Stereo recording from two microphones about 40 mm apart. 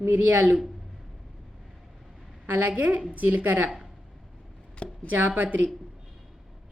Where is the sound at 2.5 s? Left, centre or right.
Right.